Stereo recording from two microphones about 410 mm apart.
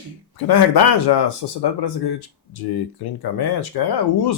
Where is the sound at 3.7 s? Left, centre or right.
Left.